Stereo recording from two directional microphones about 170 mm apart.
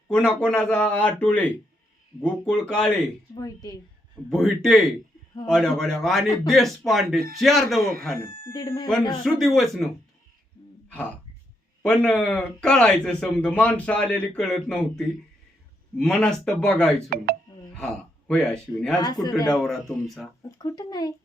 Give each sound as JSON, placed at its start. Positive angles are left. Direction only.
{"t": 0.1, "sound": "speech", "side_deg": 5}
{"t": 3.3, "sound": "speech", "side_deg": 20}
{"t": 4.3, "sound": "speech", "side_deg": 0}
{"t": 8.1, "sound": "speech", "side_deg": -65}
{"t": 8.5, "sound": "speech", "side_deg": 20}
{"t": 9.2, "sound": "speech", "side_deg": 0}
{"t": 10.8, "sound": "throat clearing", "side_deg": 5}
{"t": 11.8, "sound": "speech", "side_deg": 5}
{"t": 17.1, "sound": "speech", "side_deg": -65}
{"t": 17.7, "sound": "speech", "side_deg": 5}
{"t": 19.0, "sound": "speech", "side_deg": 25}
{"t": 19.5, "sound": "speech", "side_deg": 0}
{"t": 20.6, "sound": "speech", "side_deg": 20}